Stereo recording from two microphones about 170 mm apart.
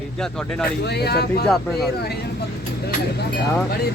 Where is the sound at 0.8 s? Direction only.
75° left (ahead or behind).